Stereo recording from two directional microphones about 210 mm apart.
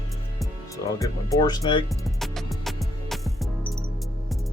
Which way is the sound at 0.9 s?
15° left (ahead or behind).